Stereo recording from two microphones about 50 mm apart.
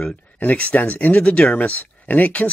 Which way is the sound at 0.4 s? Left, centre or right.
Left.